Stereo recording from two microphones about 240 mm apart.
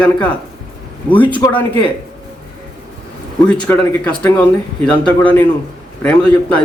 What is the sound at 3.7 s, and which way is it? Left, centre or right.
Speech, centre.